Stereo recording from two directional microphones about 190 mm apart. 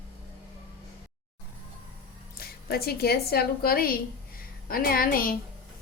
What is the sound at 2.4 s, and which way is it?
A woman's voice, 55° left (ahead or behind).